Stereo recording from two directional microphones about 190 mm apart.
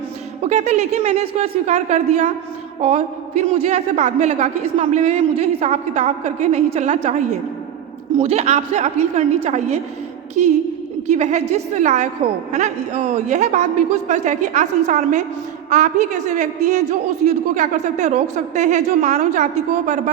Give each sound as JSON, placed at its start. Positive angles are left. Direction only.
{"t": 0.4, "sound": "a woman's voice", "side_deg": -35}
{"t": 8.2, "sound": "a woman's voice", "side_deg": -35}